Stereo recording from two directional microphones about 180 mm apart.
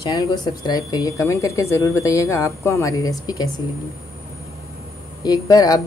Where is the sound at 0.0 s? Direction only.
20° left (ahead or behind).